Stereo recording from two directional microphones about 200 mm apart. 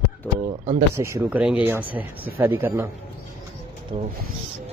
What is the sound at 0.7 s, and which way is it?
Speech, 20° right (ahead or behind).